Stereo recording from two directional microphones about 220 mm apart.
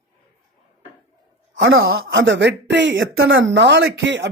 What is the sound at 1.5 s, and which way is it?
Speech, 60° right (ahead or behind).